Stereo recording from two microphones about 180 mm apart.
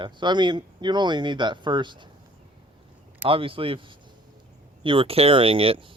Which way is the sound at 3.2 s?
30° right (ahead or behind).